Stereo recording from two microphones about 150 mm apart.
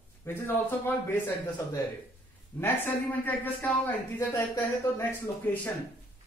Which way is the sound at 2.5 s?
15° left (ahead or behind).